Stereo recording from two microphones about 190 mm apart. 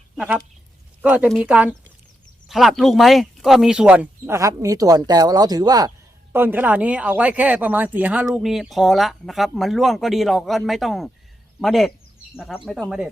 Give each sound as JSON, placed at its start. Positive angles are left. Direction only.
{"t": 0.2, "sound": "speech", "side_deg": -5}